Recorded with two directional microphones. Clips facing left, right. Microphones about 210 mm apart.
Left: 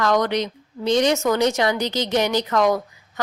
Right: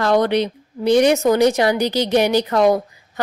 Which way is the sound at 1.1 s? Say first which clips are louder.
Right 5 dB; 35° right (ahead or behind).